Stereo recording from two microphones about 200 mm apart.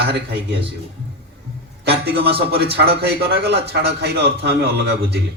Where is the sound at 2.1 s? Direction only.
55° right (ahead or behind).